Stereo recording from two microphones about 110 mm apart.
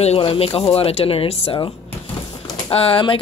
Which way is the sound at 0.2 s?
55° left (ahead or behind).